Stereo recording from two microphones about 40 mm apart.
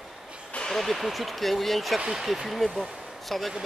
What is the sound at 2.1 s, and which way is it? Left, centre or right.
Speech, centre.